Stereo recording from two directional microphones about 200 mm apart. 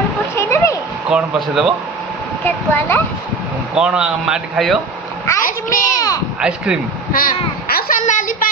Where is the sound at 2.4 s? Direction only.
10° left (ahead or behind).